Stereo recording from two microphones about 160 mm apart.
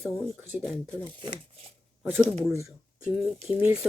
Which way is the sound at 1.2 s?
35° right (ahead or behind).